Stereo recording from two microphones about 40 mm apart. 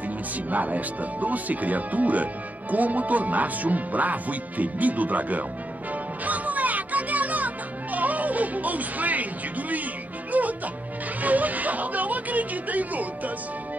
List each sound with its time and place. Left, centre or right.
0.5 s speech: right
6.2 s music: right